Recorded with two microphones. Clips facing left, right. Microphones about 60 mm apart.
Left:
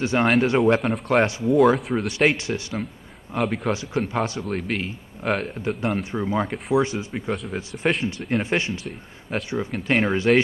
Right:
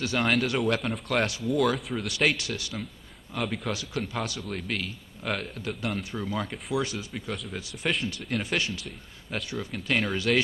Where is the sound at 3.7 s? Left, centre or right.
Left.